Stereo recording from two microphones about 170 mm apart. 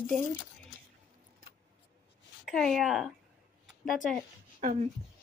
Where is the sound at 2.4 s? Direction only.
Centre (ahead or behind).